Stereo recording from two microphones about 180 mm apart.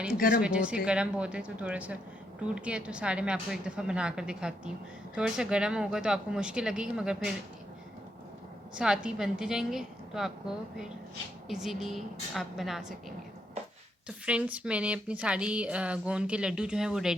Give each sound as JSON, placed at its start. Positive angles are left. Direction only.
{"t": 0.1, "sound": "speech", "side_deg": 55}
{"t": 0.4, "sound": "speech", "side_deg": -5}
{"t": 8.7, "sound": "a woman's voice", "side_deg": -5}
{"t": 11.4, "sound": "speech", "side_deg": 0}
{"t": 14.1, "sound": "a woman's voice", "side_deg": -5}